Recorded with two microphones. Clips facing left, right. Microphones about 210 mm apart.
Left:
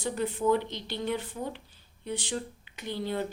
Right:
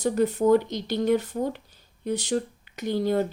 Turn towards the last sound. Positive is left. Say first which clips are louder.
# right 8 dB
turn(degrees=-45)  # may be behind; listen again after turning